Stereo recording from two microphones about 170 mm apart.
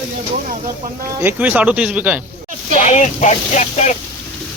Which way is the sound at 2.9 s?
45° left (ahead or behind).